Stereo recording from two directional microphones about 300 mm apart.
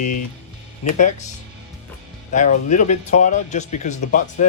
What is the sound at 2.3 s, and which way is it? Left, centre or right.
Speech, left.